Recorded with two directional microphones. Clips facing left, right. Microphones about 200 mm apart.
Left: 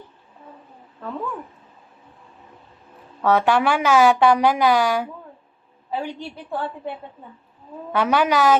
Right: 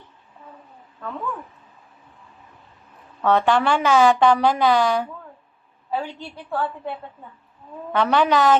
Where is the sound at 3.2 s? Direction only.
10° left (ahead or behind).